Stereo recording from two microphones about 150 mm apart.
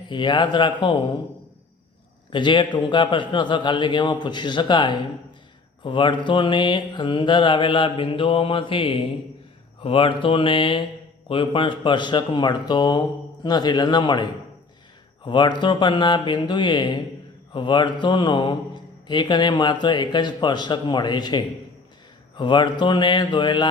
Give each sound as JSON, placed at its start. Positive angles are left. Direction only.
{"t": 0.1, "sound": "a man's voice", "side_deg": 30}
{"t": 2.3, "sound": "a man's voice", "side_deg": 30}